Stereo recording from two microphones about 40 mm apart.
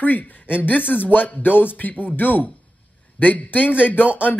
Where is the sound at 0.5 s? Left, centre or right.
Left.